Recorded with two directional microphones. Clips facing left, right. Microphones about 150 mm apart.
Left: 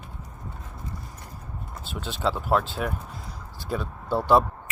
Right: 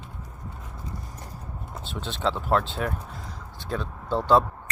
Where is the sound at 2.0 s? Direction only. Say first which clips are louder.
Even; 5° left (ahead or behind).